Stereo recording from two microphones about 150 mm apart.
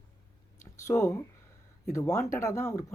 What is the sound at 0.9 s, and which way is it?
Speech, 20° left (ahead or behind).